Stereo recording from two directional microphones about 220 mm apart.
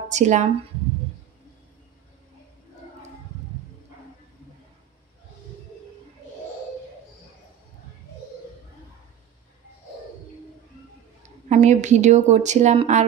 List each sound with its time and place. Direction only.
0.1 s speech: 35° right (ahead or behind)
11.4 s speech: 30° right (ahead or behind)